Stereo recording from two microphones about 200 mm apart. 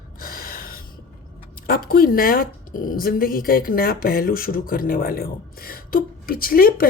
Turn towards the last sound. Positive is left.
turn(degrees=45)  # may be behind; listen again after turning